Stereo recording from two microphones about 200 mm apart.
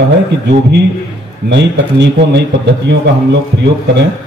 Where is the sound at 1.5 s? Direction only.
60° right (ahead or behind).